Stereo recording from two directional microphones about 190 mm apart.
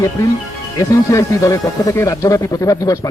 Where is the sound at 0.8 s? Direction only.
15° left (ahead or behind).